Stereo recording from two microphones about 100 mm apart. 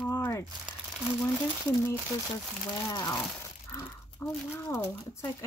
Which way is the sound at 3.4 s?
30° left (ahead or behind).